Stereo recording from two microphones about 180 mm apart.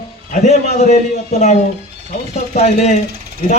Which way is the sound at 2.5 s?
40° left (ahead or behind).